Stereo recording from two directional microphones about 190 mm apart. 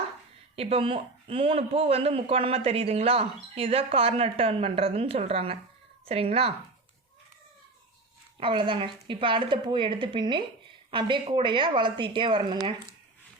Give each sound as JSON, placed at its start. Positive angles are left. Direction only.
{"t": 0.5, "sound": "speech", "side_deg": -30}
{"t": 8.4, "sound": "a woman's voice", "side_deg": -25}